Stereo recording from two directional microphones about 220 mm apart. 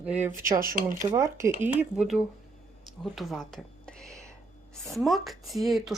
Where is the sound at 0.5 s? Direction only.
40° right (ahead or behind).